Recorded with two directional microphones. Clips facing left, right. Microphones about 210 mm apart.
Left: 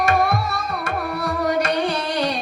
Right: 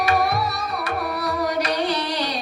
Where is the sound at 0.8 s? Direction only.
50° left (ahead or behind).